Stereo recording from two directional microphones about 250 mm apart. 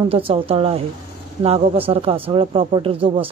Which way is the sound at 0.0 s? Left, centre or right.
Right.